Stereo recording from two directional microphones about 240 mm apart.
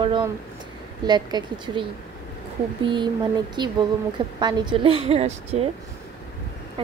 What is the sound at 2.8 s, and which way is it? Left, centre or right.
A woman's voice, centre.